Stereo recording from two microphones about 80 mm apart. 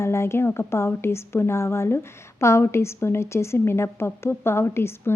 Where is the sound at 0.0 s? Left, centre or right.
Left.